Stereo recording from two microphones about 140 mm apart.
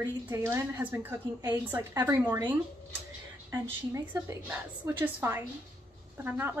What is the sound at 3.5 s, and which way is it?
A woman's voice, 20° right (ahead or behind).